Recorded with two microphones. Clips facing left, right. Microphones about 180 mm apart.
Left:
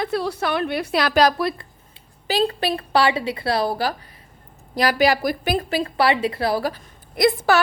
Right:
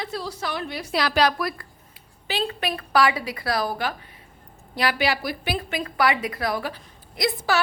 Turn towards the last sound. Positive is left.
turn(degrees=55)  # may be behind; listen again after turning